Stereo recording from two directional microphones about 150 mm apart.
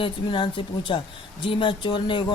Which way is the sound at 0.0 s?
35° left (ahead or behind).